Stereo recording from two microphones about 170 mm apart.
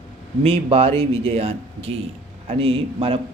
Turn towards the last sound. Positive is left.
turn(degrees=-35)  # may be behind; listen again after turning